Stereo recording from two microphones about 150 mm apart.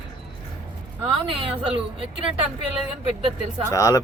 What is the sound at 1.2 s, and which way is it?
Speech, 35° right (ahead or behind).